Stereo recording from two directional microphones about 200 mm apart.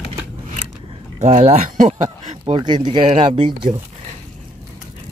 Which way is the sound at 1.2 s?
30° right (ahead or behind).